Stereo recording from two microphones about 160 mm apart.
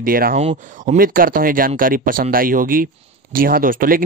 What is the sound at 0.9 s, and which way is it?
Speech, 65° right (ahead or behind).